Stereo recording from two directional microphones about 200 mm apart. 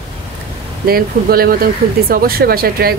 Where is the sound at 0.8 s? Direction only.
50° right (ahead or behind).